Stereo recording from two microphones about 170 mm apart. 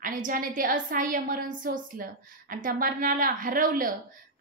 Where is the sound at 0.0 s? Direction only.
55° right (ahead or behind).